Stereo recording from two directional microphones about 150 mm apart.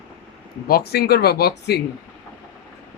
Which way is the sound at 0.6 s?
85° left.